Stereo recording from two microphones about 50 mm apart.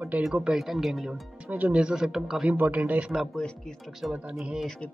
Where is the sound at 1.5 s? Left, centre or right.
Right.